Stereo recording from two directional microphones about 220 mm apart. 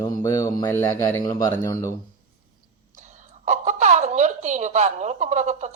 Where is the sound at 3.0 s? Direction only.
30° right (ahead or behind).